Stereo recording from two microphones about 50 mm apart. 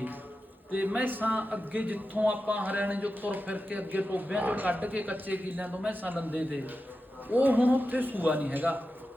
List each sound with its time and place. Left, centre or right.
0.7 s speech: right